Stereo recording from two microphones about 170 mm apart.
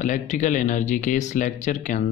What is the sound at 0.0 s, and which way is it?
Speech, 50° left (ahead or behind).